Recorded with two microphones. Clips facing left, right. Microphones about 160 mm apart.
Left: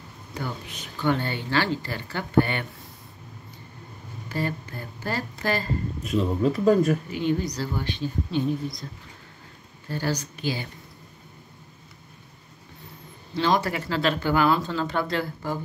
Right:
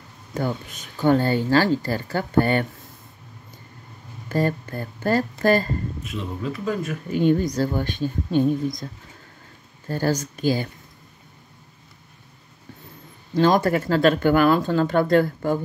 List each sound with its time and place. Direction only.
0.3 s speech: 45° right (ahead or behind)
4.3 s speech: 45° right (ahead or behind)
6.0 s speech: 40° left (ahead or behind)
7.1 s speech: 50° right (ahead or behind)
9.8 s speech: 45° right (ahead or behind)
13.3 s speech: 50° right (ahead or behind)